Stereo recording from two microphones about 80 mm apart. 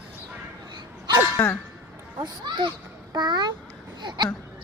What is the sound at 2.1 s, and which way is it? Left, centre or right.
A child's voice, right.